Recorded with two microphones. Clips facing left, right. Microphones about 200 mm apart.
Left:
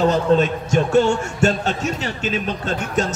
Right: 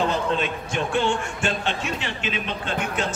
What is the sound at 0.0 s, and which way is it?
A man's voice, 40° left (ahead or behind).